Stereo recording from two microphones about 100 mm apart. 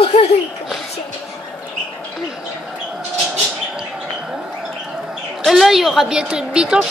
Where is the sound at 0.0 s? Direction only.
75° left (ahead or behind).